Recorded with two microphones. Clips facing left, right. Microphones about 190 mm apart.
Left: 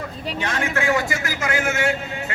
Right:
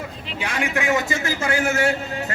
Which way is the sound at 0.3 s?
10° right (ahead or behind).